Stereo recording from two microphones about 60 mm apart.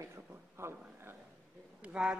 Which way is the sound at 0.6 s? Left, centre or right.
Right.